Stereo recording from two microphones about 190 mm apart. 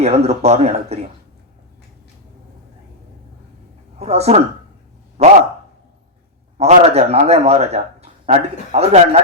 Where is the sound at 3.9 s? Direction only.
35° right (ahead or behind).